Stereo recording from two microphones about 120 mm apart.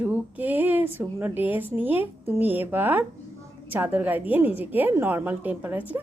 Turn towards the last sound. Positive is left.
turn(degrees=-15)  # may be behind; listen again after turning